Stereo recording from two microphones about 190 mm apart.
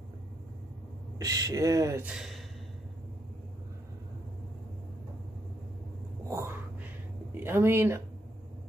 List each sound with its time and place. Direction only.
1.1 s speech: 20° right (ahead or behind)
2.0 s speech: centre (ahead or behind)
6.2 s a sound: 15° right (ahead or behind)
7.3 s speech: 10° right (ahead or behind)